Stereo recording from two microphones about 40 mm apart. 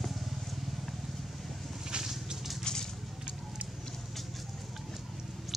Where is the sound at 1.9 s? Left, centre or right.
Centre.